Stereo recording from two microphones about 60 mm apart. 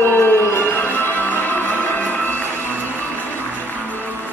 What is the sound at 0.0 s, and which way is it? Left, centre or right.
Music, left.